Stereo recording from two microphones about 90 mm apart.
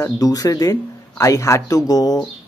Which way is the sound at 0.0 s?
40° left (ahead or behind).